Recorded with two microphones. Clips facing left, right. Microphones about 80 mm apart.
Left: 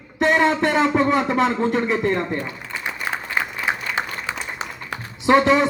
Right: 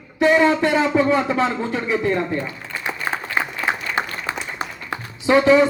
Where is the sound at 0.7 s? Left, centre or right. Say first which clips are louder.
Right 1 dB; left.